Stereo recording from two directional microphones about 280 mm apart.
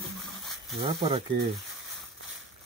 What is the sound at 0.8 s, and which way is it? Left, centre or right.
Speech, centre.